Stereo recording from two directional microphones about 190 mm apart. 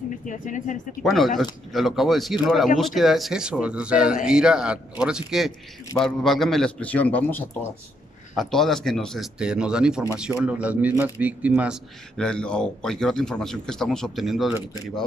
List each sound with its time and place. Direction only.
0.2 s speech: 40° left (ahead or behind)
1.0 s speech: centre (ahead or behind)